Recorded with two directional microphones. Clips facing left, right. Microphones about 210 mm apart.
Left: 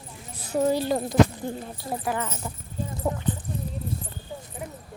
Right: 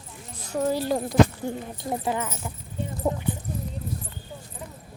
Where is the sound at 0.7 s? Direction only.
5° right (ahead or behind).